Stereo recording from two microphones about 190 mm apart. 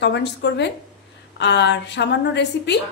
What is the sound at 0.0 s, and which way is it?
A woman's voice, 65° left (ahead or behind).